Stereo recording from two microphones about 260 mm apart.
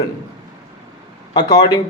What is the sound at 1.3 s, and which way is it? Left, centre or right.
Speech, centre.